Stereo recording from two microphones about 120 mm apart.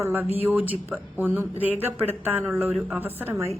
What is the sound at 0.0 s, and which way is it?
Speech, 15° right (ahead or behind).